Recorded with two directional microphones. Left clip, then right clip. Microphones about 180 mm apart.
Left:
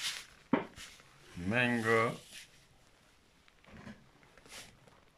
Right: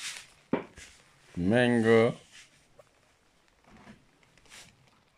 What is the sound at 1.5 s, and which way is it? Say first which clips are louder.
Speech: right 7 dB; 30° right (ahead or behind).